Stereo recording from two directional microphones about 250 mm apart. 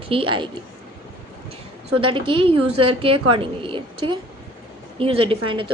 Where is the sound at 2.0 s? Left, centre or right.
Right.